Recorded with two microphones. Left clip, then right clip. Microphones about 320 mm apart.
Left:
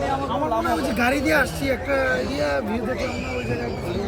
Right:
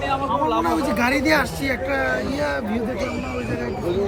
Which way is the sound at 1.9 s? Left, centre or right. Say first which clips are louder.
Left 2 dB; centre.